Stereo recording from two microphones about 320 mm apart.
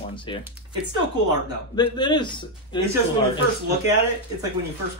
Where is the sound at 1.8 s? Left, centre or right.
Centre.